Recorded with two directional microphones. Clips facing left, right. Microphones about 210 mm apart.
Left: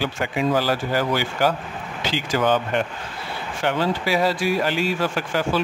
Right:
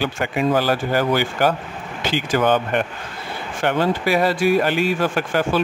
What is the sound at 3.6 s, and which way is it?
Speech, 55° right (ahead or behind).